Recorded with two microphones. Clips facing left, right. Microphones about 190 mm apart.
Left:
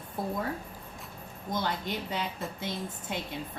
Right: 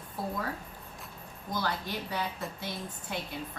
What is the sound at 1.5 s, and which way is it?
A woman's voice, 20° left (ahead or behind).